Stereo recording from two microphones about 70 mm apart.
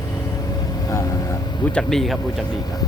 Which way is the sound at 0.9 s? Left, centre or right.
Left.